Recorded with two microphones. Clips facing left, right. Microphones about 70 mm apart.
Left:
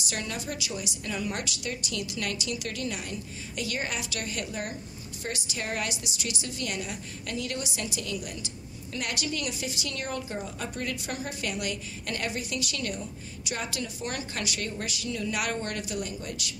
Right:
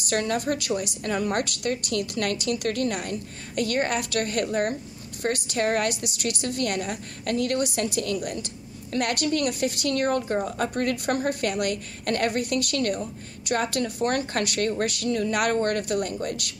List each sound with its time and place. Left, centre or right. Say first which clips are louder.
0.0 s a woman's voice: right 9 dB; right